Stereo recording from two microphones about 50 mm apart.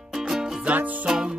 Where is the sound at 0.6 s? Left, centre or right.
Right.